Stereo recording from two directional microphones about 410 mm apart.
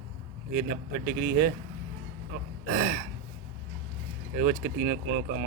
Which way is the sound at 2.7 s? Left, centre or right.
Right.